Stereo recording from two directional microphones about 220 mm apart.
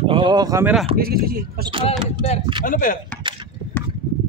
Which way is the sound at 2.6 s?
40° left (ahead or behind).